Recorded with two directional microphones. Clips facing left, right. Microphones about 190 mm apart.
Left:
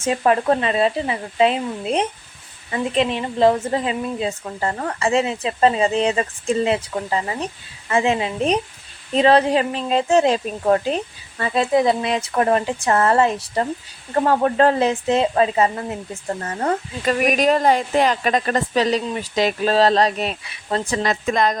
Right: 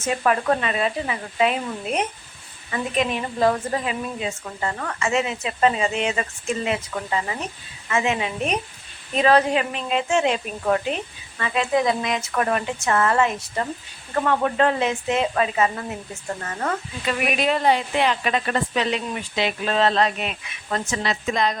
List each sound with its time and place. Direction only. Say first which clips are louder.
0.0 s speech: left 4 dB; 30° left (ahead or behind); by 21.6 s 45° left (ahead or behind)